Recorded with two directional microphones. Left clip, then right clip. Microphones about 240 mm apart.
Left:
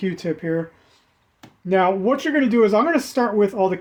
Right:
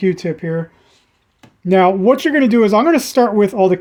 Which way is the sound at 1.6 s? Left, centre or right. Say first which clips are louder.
Right 7 dB; right.